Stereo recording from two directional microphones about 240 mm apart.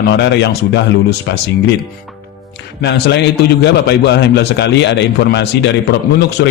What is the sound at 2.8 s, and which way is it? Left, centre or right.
A man's voice, left.